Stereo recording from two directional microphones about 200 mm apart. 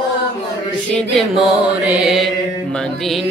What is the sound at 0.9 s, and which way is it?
Mantra, centre (ahead or behind).